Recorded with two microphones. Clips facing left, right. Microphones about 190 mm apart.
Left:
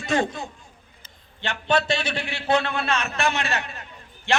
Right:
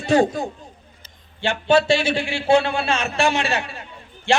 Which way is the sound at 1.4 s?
25° right (ahead or behind).